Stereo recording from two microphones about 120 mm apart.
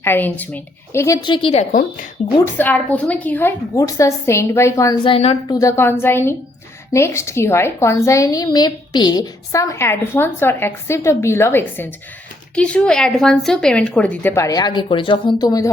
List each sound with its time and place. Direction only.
0.0 s a woman's voice: 15° left (ahead or behind)
1.2 s a woman's voice: 45° left (ahead or behind)
2.4 s a woman's voice: 15° left (ahead or behind)
3.8 s a woman's voice: 25° left (ahead or behind)
5.0 s a woman's voice: 50° left (ahead or behind)
5.5 s a woman's voice: 25° left (ahead or behind)
12.5 s a woman's voice: 10° left (ahead or behind)
14.4 s a woman's voice: 35° left (ahead or behind)